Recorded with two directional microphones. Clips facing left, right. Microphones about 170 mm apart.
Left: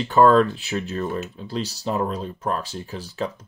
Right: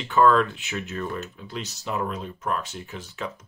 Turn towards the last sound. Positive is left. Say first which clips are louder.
# left 5 dB
turn(degrees=35)  # may be behind; listen again after turning